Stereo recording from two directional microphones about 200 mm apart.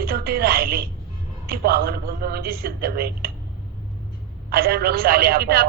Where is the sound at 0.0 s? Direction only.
50° right (ahead or behind).